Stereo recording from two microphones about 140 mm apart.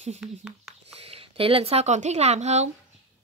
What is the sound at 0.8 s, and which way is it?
Speech, 45° right (ahead or behind).